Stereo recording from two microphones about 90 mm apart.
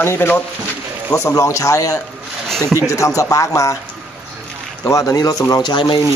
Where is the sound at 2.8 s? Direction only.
35° left (ahead or behind).